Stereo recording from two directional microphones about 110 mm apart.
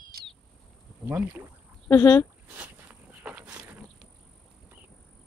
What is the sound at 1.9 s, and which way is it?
Speech, 25° left (ahead or behind).